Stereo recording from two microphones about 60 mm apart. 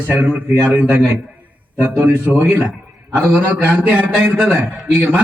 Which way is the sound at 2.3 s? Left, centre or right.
Centre.